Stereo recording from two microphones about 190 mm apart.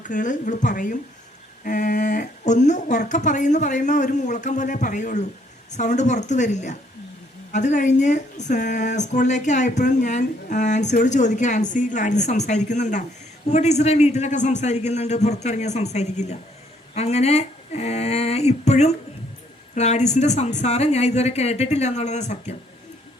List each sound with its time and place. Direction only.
0.0 s a woman's voice: 40° left (ahead or behind)